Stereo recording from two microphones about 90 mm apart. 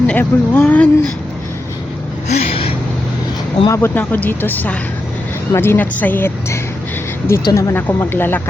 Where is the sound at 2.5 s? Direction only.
90° left.